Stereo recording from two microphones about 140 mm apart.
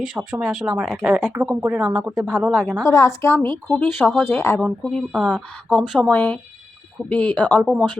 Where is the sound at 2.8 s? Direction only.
25° left (ahead or behind).